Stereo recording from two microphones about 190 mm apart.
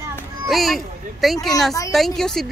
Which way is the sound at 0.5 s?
Centre (ahead or behind).